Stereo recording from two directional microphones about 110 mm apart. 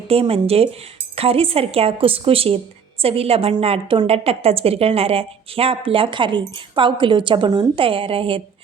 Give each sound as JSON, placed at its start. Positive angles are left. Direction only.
{"t": 0.1, "sound": "a woman's voice", "side_deg": -60}